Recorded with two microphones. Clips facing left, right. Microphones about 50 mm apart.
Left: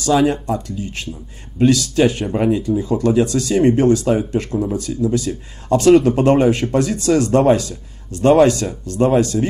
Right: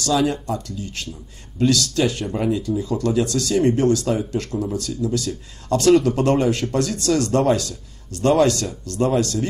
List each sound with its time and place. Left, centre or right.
0.0 s speech: left